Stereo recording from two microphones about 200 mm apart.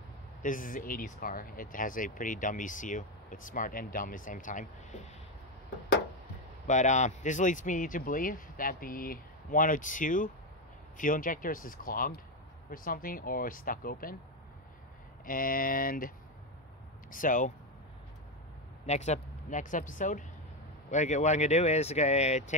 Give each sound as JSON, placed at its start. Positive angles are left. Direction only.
{"t": 0.4, "sound": "speech", "side_deg": 40}
{"t": 6.7, "sound": "speech", "side_deg": 35}
{"t": 15.2, "sound": "speech", "side_deg": 45}
{"t": 17.1, "sound": "speech", "side_deg": 40}
{"t": 18.9, "sound": "speech", "side_deg": 35}